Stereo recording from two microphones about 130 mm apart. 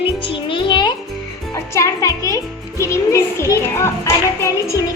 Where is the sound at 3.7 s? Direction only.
20° left (ahead or behind).